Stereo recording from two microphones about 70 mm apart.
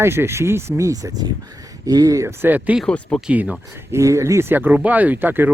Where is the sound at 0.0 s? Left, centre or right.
Right.